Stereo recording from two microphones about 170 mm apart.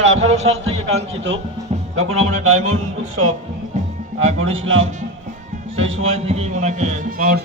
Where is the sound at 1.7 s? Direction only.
40° right (ahead or behind).